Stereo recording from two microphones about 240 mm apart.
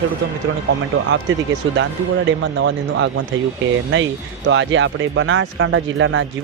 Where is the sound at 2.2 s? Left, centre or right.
Right.